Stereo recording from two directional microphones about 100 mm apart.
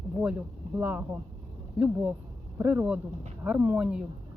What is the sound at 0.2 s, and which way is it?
Speech, 15° right (ahead or behind).